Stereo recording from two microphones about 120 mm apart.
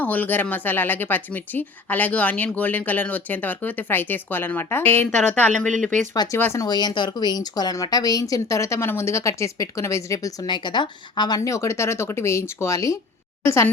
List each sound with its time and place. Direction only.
0.0 s speech: 15° left (ahead or behind)
5.5 s speech: 90° right
6.3 s speech: 20° left (ahead or behind)
6.7 s a woman's voice: 35° left (ahead or behind)